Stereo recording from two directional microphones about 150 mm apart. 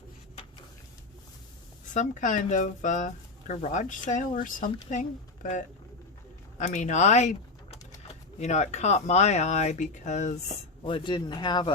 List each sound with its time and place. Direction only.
1.9 s speech: 55° left (ahead or behind)
10.8 s speech: 35° left (ahead or behind)